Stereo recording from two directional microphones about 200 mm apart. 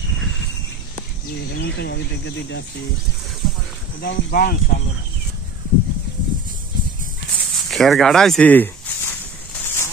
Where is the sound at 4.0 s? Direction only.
50° left (ahead or behind).